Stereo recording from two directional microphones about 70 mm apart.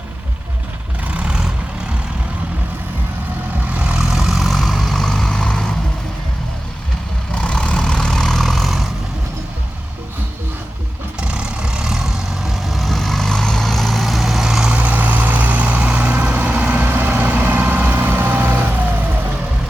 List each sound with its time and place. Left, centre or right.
1.0 s vehicle: centre
3.8 s vehicle: centre
4.1 s vehicle: centre
7.4 s vehicle: centre
11.2 s vehicle: centre
14.8 s vehicle: right